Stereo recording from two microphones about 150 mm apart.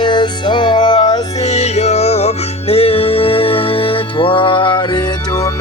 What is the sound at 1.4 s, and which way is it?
Music, 45° left (ahead or behind).